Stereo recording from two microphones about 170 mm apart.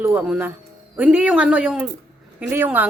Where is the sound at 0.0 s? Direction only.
10° right (ahead or behind).